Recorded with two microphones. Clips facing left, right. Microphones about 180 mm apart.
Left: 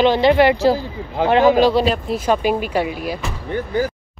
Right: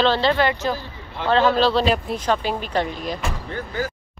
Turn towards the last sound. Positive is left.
turn(degrees=15)  # may be behind; listen again after turning